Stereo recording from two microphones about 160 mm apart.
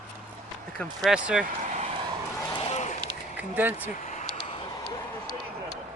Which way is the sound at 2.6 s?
45° left (ahead or behind).